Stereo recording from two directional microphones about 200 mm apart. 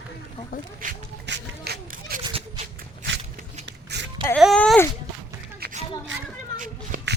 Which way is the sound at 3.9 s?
55° right (ahead or behind).